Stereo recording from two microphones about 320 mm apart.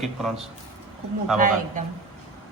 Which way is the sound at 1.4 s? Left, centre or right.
Right.